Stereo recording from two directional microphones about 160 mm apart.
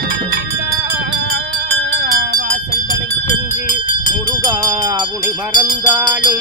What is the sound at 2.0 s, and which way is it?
Music, 90° right.